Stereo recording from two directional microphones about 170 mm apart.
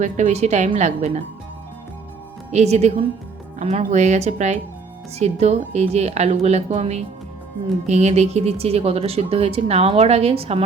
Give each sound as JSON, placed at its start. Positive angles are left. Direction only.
{"t": 0.0, "sound": "a woman's voice", "side_deg": -45}
{"t": 2.5, "sound": "a woman's voice", "side_deg": -40}